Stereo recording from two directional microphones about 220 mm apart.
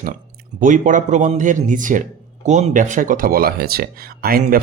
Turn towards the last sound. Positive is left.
turn(degrees=-40)  # may be behind; listen again after turning